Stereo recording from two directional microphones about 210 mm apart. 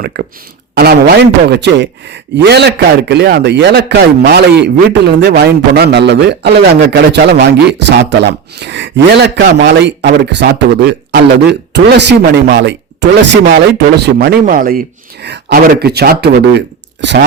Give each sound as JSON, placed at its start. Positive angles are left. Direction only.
{"t": 0.0, "sound": "speech", "side_deg": -50}